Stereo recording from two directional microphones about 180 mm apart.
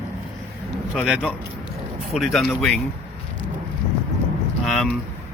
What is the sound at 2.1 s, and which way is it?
Speech, centre (ahead or behind).